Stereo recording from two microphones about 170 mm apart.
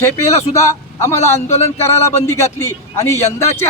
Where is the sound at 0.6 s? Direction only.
15° left (ahead or behind).